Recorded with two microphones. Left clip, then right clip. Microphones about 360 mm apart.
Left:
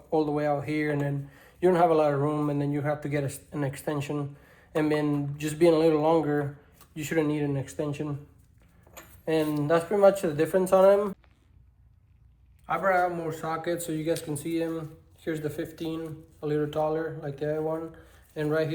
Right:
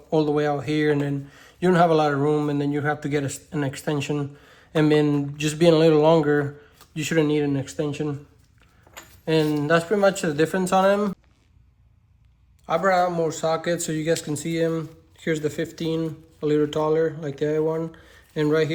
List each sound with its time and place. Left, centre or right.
0.1 s speech: right
9.2 s speech: right
12.6 s speech: centre